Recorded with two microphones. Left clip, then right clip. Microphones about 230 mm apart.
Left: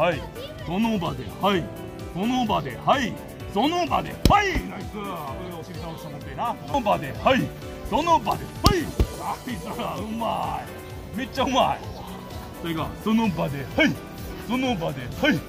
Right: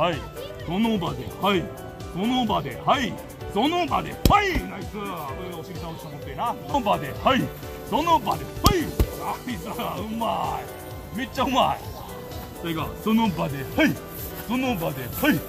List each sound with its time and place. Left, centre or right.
0.7 s speech: left; by 5.1 s centre
6.3 s speech: left
9.8 s speech: centre; by 14.9 s left